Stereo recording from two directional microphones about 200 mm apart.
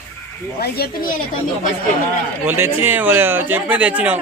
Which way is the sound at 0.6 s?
50° left (ahead or behind).